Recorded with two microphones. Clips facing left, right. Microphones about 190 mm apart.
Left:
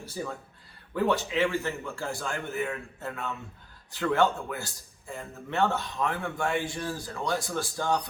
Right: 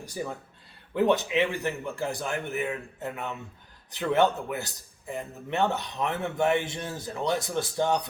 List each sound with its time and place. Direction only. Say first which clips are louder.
0.9 s a man's voice: right 3 dB; 20° right (ahead or behind)